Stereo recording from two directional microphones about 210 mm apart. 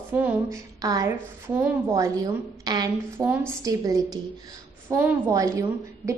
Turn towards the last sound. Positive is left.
turn(degrees=-15)  # may be behind; listen again after turning